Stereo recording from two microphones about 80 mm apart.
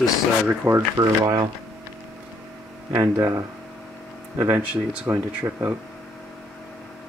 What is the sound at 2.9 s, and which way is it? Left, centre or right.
Speech, right.